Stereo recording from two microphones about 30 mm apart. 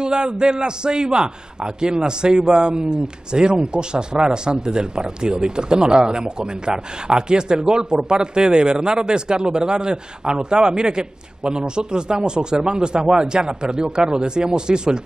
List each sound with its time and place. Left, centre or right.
0.0 s speech: right